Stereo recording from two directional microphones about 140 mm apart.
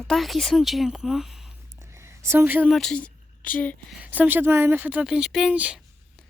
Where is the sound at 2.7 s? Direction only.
Centre (ahead or behind).